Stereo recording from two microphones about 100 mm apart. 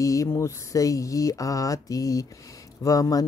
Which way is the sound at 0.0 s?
30° left (ahead or behind).